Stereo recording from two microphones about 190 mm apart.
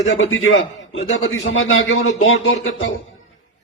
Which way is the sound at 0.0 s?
90° left.